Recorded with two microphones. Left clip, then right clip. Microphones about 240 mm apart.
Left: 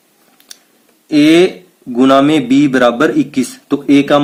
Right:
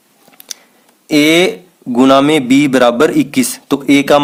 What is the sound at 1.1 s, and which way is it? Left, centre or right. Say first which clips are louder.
A man's voice: left 1 dB; right.